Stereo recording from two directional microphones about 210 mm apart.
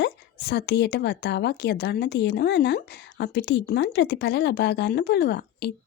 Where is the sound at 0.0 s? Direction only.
50° left (ahead or behind).